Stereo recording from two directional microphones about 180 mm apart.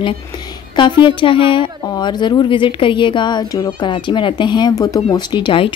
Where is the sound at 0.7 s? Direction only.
25° left (ahead or behind).